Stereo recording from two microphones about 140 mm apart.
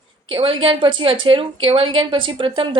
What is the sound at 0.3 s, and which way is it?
A woman's voice, 35° right (ahead or behind).